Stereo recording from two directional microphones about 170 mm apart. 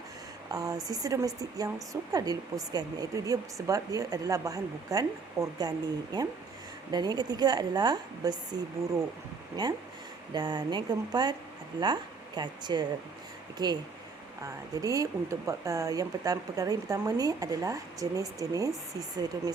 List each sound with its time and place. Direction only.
0.4 s speech: 20° right (ahead or behind)